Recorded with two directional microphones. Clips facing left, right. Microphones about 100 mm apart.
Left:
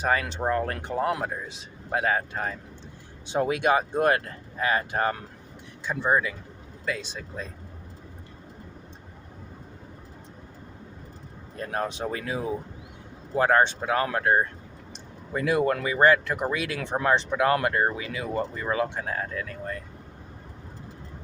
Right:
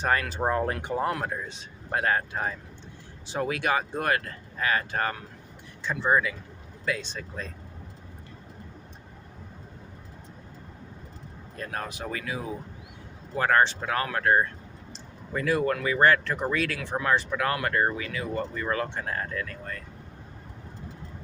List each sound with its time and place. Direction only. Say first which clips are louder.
0.0 s speech: left 1 dB; 5° left (ahead or behind)
0.3 s speech: even; 15° right (ahead or behind)
1.2 s speech: even; 5° left (ahead or behind)
3.2 s speech: left 4 dB; 20° left (ahead or behind)
11.5 s speech: left 5 dB; 25° left (ahead or behind)
14.9 s a sound: left 1 dB; 20° left (ahead or behind)
15.8 s speech: left 2 dB; 15° left (ahead or behind)